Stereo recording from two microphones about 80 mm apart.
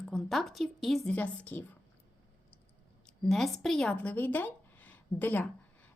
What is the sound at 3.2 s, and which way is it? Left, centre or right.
Speech, centre.